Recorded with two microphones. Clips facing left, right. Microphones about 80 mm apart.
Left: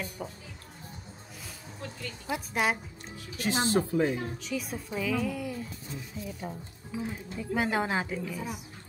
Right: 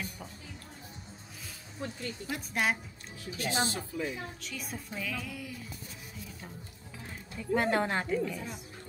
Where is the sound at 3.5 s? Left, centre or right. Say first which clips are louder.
Left 5 dB; left.